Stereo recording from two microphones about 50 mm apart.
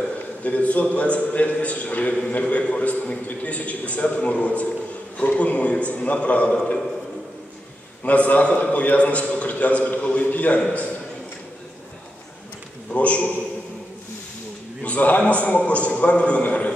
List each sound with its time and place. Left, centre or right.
0.4 s a man's voice: left
8.0 s a man's voice: left
12.9 s a man's voice: left
14.8 s a man's voice: left